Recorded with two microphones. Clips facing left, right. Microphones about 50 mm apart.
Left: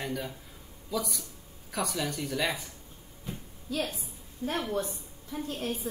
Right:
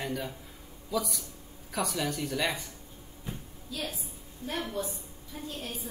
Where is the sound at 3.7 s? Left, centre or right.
Left.